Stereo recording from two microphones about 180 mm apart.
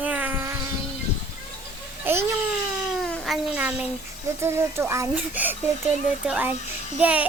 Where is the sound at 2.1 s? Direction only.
10° right (ahead or behind).